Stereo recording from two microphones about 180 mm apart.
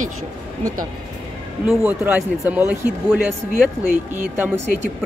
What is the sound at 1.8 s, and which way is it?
A man's voice, 10° right (ahead or behind).